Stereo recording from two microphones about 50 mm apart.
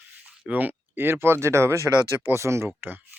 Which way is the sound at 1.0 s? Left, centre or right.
Right.